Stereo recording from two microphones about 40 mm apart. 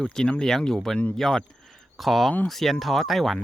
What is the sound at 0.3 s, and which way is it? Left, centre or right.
Speech, centre.